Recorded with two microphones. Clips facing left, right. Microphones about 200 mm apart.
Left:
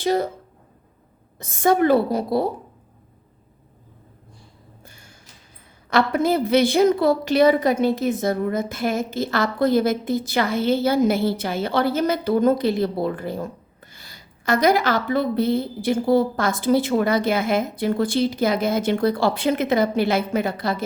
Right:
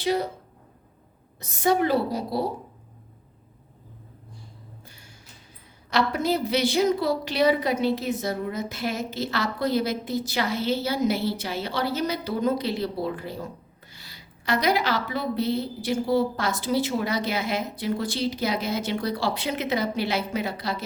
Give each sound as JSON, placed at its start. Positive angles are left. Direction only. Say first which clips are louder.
{"t": 0.0, "sound": "a woman's voice", "louder": "left 4 dB", "side_deg": 50}
{"t": 1.4, "sound": "a woman's voice", "louder": "left 4 dB", "side_deg": 50}
{"t": 4.8, "sound": "music", "louder": "left 1 dB", "side_deg": 50}
{"t": 5.9, "sound": "a woman's voice", "louder": "left 5 dB", "side_deg": 55}